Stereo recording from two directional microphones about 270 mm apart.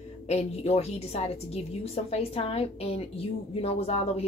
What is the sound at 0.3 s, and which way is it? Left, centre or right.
A woman's voice, left.